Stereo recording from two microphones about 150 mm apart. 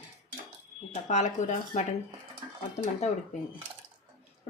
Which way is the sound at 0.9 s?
55° left (ahead or behind).